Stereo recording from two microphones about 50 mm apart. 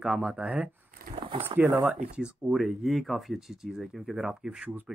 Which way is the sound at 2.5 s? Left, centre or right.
Centre.